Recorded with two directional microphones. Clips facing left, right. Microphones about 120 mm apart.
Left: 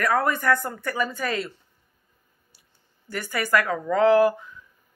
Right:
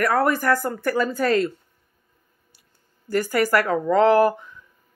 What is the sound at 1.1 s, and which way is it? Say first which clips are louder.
Speech: right 8 dB; 45° right (ahead or behind).